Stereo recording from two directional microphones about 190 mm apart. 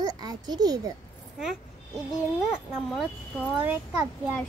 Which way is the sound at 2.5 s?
5° left (ahead or behind).